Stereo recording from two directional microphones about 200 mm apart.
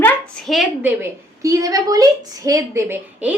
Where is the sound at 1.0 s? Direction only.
15° right (ahead or behind).